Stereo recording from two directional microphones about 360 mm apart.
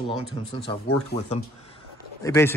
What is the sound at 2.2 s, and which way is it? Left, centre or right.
Speech, centre.